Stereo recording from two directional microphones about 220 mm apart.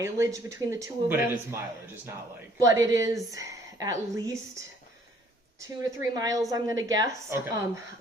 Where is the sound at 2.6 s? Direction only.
15° right (ahead or behind).